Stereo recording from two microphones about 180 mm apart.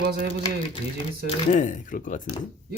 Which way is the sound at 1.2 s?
40° left (ahead or behind).